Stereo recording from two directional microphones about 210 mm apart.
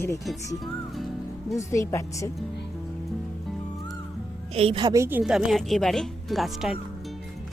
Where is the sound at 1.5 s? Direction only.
15° left (ahead or behind).